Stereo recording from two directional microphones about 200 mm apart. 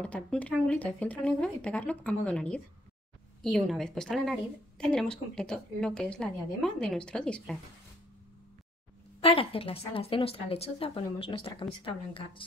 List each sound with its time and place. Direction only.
0.0 s a woman's voice: 5° left (ahead or behind)
9.2 s a woman's voice: 30° left (ahead or behind)